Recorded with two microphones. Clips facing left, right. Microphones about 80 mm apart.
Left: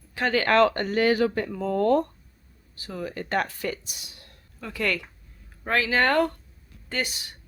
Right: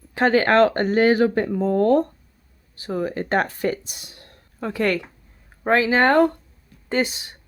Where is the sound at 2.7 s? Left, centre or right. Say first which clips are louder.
Right 8 dB; right.